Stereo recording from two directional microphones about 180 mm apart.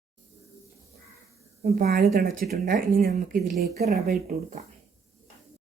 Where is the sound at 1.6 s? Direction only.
55° right (ahead or behind).